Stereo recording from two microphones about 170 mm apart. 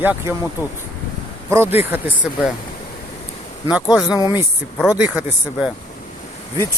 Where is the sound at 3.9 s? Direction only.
20° left (ahead or behind).